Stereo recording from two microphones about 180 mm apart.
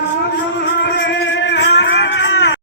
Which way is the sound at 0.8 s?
75° left (ahead or behind).